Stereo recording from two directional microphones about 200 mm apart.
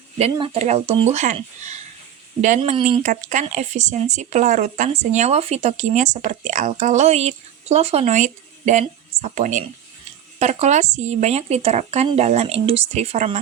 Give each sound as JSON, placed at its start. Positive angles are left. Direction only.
{"t": 0.2, "sound": "speech", "side_deg": -30}